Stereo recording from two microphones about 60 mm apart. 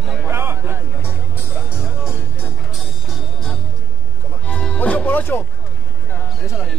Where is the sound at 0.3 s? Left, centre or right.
Right.